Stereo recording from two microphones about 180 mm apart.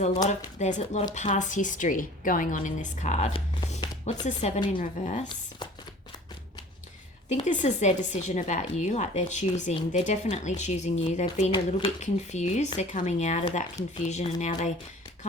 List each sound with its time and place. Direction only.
0.3 s a woman's voice: 40° left (ahead or behind)
7.3 s speech: 40° left (ahead or behind)